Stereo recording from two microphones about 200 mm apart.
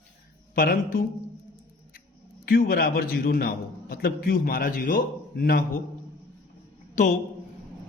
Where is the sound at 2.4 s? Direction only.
45° left (ahead or behind).